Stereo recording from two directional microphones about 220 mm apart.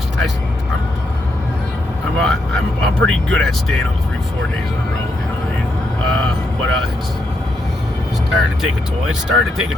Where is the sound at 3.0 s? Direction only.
65° right (ahead or behind).